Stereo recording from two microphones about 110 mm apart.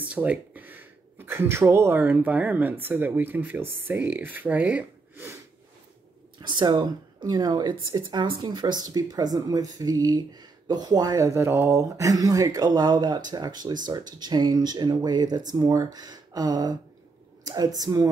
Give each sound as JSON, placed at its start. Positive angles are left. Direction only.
{"t": 0.1, "sound": "speech", "side_deg": -15}
{"t": 6.4, "sound": "speech", "side_deg": -40}